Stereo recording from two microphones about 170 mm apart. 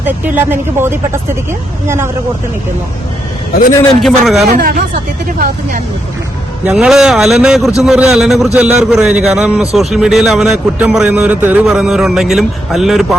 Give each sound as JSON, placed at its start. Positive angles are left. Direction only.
{"t": 0.0, "sound": "speech", "side_deg": -10}
{"t": 4.0, "sound": "a man's voice", "side_deg": 0}
{"t": 4.5, "sound": "speech", "side_deg": -55}
{"t": 6.7, "sound": "a man's voice", "side_deg": -5}